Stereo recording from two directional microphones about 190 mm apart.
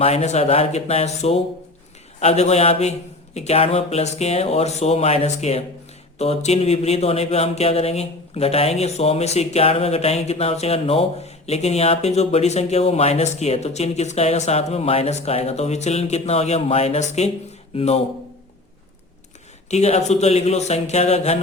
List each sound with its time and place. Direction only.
0.0 s speech: 35° left (ahead or behind)
19.7 s speech: 35° left (ahead or behind)